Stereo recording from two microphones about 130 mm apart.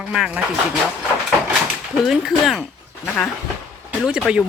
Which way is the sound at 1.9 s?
5° right (ahead or behind).